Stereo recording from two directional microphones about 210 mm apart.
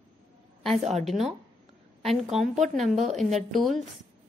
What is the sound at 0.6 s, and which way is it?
Speech, centre (ahead or behind).